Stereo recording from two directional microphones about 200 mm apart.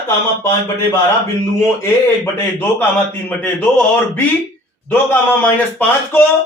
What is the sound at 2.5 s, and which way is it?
Speech, 10° left (ahead or behind).